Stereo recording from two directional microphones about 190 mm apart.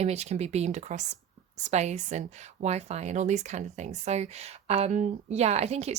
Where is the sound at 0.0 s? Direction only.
35° right (ahead or behind).